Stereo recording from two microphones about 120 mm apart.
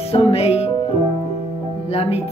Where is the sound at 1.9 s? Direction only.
55° left (ahead or behind).